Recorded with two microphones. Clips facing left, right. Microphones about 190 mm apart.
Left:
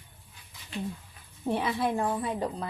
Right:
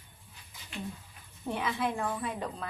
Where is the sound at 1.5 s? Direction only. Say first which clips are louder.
Left 4 dB; 35° left (ahead or behind).